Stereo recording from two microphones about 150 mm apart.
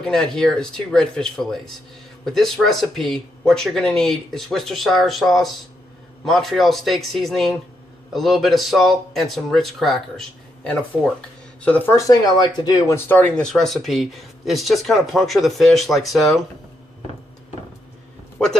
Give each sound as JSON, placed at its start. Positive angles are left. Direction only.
{"t": 0.1, "sound": "speech", "side_deg": 5}
{"t": 11.9, "sound": "speech", "side_deg": 25}
{"t": 13.1, "sound": "speech", "side_deg": 10}